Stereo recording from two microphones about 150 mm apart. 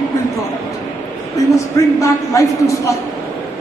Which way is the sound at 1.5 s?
20° left (ahead or behind).